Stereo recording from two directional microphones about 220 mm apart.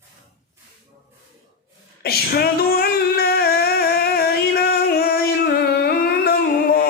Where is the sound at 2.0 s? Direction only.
45° left (ahead or behind).